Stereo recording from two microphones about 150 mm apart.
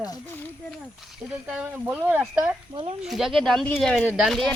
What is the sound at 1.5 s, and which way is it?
Speech, 10° right (ahead or behind).